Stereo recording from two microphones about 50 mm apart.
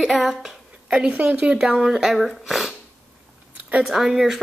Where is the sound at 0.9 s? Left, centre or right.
Right.